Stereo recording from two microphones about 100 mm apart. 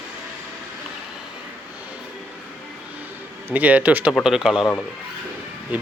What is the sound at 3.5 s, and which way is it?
Speech, 15° right (ahead or behind).